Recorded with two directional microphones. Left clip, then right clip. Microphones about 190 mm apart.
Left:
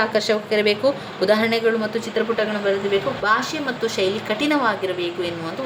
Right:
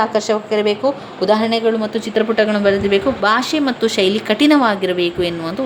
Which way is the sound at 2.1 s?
45° right (ahead or behind).